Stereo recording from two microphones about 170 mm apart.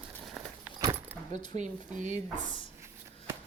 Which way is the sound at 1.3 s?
45° right (ahead or behind).